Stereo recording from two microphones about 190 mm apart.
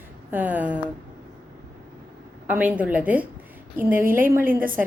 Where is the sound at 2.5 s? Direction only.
10° right (ahead or behind).